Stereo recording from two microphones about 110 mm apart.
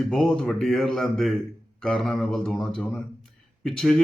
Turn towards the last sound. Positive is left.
turn(degrees=5)  # may be behind; listen again after turning